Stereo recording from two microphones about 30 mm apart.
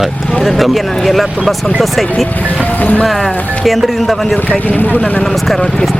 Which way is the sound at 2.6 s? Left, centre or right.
Left.